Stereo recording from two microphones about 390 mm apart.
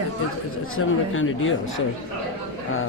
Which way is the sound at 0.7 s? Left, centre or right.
Left.